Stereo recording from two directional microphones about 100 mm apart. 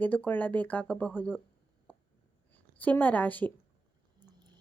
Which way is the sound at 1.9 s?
15° left (ahead or behind).